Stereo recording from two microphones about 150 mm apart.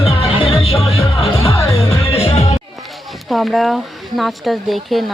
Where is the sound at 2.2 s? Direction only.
45° left (ahead or behind).